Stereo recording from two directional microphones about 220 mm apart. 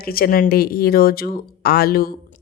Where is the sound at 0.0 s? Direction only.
45° left (ahead or behind).